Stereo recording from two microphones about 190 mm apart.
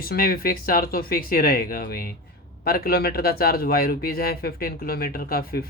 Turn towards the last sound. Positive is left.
turn(degrees=50)  # may be behind; listen again after turning